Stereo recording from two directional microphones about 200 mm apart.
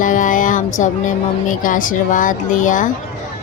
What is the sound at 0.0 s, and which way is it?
Music, 40° left (ahead or behind).